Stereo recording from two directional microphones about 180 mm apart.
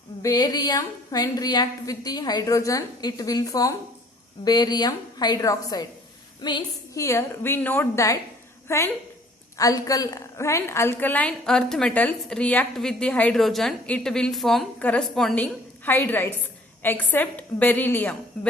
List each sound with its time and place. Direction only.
0.2 s a woman's voice: 20° left (ahead or behind)